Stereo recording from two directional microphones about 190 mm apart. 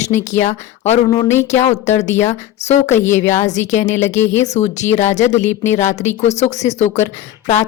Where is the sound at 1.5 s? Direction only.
35° left (ahead or behind).